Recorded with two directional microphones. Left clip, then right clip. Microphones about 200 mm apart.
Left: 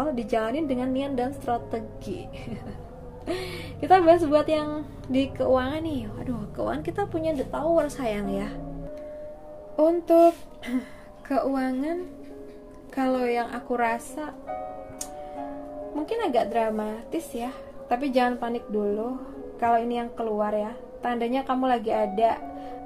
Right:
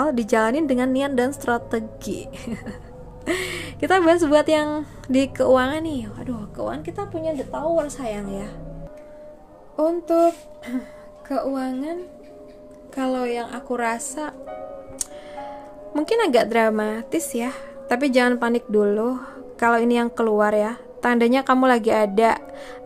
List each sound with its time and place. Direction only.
0.0 s a woman's voice: 35° right (ahead or behind); by 6.3 s 15° right (ahead or behind)
6.5 s a woman's voice: centre (ahead or behind)
9.8 s a woman's voice: 5° right (ahead or behind); by 14.2 s 20° right (ahead or behind)
15.9 s a woman's voice: 40° right (ahead or behind)